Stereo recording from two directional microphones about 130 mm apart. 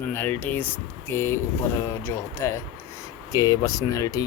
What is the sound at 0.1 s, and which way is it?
Speech, 15° left (ahead or behind).